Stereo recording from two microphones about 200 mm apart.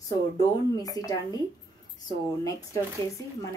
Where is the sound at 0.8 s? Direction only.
20° left (ahead or behind).